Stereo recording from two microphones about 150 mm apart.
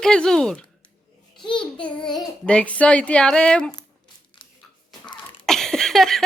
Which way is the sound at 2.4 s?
10° left (ahead or behind).